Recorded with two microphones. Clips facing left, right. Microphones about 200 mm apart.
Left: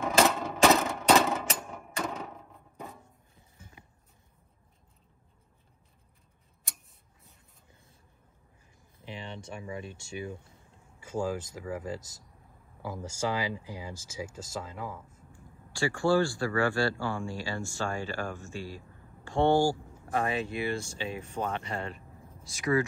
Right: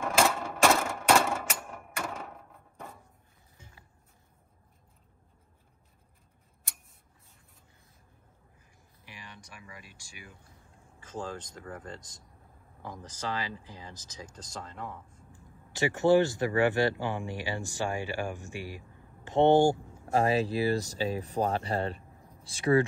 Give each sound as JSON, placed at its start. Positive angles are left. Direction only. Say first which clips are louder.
{"t": 0.0, "sound": "a sound", "louder": "left 2 dB", "side_deg": 0}
{"t": 9.0, "sound": "speech", "louder": "left 10 dB", "side_deg": 25}
{"t": 11.0, "sound": "speech", "louder": "left 6 dB", "side_deg": 10}
{"t": 15.7, "sound": "speech", "louder": "right 3 dB", "side_deg": -20}